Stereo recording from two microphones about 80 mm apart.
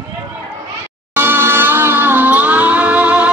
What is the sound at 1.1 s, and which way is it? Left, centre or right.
Music, right.